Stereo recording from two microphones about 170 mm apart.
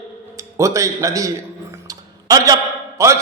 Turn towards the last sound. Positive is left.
turn(degrees=-15)  # may be behind; listen again after turning